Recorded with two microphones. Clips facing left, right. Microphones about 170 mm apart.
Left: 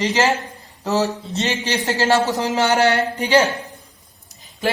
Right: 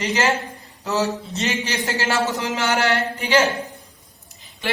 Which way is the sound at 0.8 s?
40° left (ahead or behind).